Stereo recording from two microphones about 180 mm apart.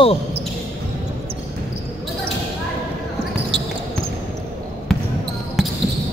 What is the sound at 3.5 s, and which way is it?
Basketball bounce, 70° right (ahead or behind).